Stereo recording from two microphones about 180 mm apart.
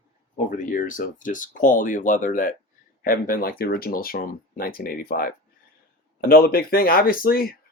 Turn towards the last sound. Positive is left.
turn(degrees=55)  # may be behind; listen again after turning